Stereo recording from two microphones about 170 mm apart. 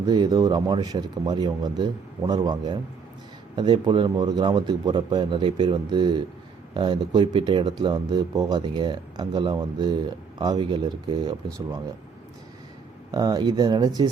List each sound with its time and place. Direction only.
0.0 s speech: 20° right (ahead or behind)
13.1 s speech: 20° right (ahead or behind)